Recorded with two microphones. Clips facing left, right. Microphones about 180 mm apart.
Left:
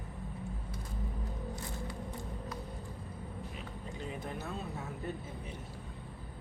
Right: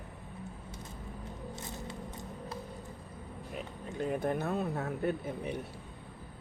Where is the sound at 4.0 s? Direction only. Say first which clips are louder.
Right 10 dB; 55° right (ahead or behind).